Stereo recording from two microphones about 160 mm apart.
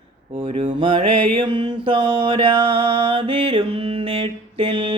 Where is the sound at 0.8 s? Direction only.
30° right (ahead or behind).